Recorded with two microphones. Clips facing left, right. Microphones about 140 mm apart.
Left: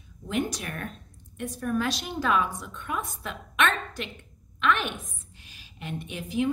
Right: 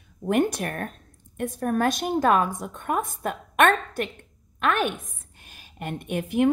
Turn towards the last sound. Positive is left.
turn(degrees=-60)  # may be behind; listen again after turning